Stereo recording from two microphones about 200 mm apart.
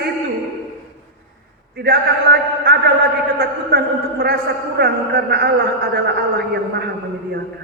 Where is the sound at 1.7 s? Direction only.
50° right (ahead or behind).